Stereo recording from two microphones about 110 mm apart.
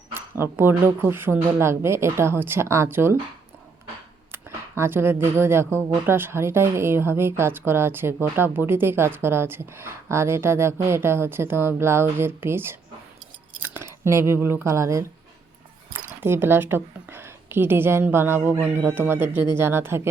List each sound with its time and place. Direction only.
0.1 s speech: 20° right (ahead or behind)
4.3 s speech: 20° right (ahead or behind)